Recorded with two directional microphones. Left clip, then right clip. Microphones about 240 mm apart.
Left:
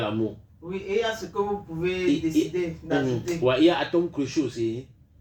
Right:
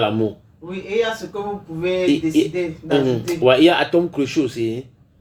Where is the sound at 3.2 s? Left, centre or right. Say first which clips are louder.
Right 7 dB; centre.